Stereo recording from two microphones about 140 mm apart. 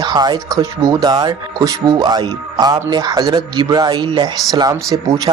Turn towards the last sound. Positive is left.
turn(degrees=-25)  # may be behind; listen again after turning